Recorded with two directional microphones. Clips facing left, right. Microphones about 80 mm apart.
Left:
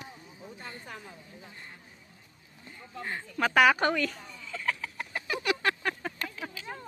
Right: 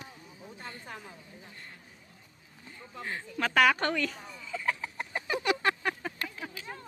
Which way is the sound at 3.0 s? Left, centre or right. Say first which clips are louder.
Left 3 dB; centre.